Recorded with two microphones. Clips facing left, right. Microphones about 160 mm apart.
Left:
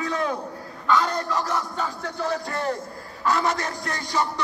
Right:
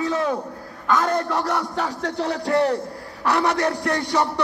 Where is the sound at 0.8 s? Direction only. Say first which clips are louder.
Right 2 dB; 50° right (ahead or behind).